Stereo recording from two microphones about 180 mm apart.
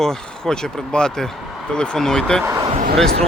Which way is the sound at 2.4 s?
15° right (ahead or behind).